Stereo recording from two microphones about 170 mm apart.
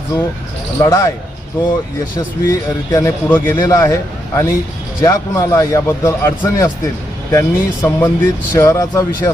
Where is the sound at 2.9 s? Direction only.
15° left (ahead or behind).